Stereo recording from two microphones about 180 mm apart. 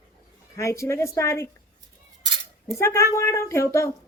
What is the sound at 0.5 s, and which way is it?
Speech, 15° left (ahead or behind).